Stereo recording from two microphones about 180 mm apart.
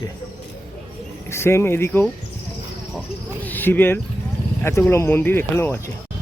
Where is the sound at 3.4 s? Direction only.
10° left (ahead or behind).